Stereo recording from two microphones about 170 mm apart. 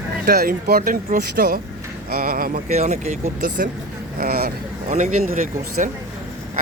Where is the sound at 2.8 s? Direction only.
40° right (ahead or behind).